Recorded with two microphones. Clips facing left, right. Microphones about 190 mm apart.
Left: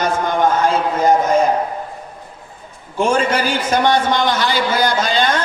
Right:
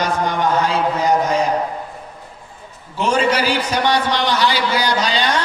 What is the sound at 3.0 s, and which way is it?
A man's voice, 50° left (ahead or behind).